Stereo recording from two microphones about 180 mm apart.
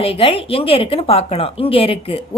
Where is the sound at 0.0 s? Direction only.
30° left (ahead or behind).